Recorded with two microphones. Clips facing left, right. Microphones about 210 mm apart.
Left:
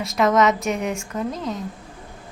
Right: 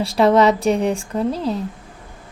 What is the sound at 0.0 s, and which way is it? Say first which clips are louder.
Speech: right 4 dB; 30° right (ahead or behind).